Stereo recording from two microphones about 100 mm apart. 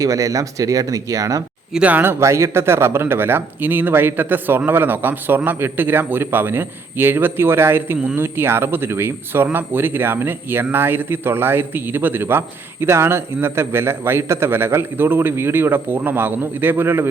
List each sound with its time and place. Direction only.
0.0 s speech: 35° right (ahead or behind)
1.7 s speech: 15° right (ahead or behind)